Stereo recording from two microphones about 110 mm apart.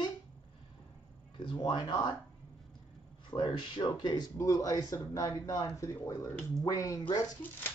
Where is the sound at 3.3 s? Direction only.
45° left (ahead or behind).